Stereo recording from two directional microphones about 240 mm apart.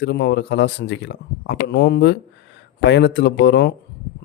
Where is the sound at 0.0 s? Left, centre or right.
Left.